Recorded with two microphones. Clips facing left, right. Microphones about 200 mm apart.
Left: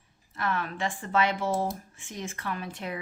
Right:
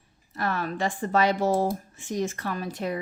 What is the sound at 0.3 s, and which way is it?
Speech, 40° right (ahead or behind).